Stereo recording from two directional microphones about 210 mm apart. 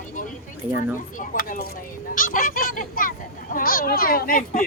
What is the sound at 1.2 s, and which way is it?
A child's voice, 40° left (ahead or behind).